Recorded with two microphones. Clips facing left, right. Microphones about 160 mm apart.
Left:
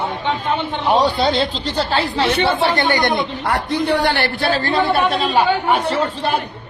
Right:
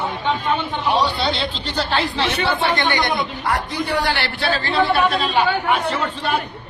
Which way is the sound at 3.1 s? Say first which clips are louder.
Left 2 dB; 60° left (ahead or behind).